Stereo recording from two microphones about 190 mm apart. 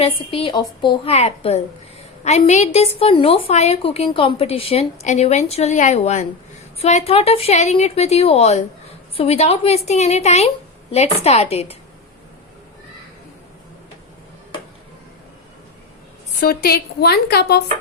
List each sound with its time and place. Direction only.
0.0 s a woman's voice: 30° left (ahead or behind)
16.4 s a woman's voice: 50° left (ahead or behind)